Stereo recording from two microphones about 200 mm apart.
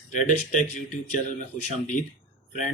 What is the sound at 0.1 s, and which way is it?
Speech, 40° left (ahead or behind).